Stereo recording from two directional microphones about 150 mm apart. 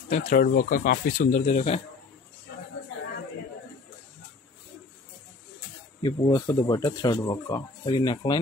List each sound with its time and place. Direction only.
0.1 s speech: 65° left (ahead or behind); by 1.8 s 45° left (ahead or behind)
6.0 s speech: 25° left (ahead or behind)